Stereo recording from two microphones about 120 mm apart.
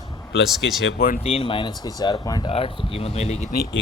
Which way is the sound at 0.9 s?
55° left (ahead or behind).